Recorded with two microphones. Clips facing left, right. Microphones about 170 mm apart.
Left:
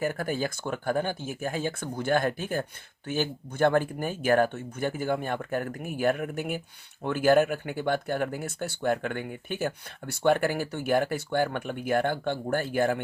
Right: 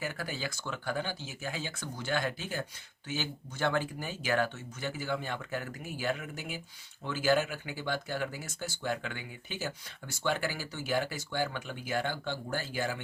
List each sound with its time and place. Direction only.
0.0 s speech: 50° left (ahead or behind)